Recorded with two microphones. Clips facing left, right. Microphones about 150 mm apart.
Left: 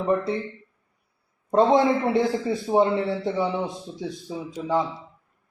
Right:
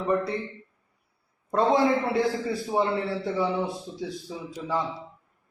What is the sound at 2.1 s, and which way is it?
Speech, 25° left (ahead or behind).